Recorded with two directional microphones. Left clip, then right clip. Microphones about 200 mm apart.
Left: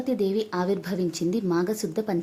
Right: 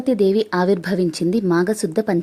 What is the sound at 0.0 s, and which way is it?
Speech, 35° right (ahead or behind).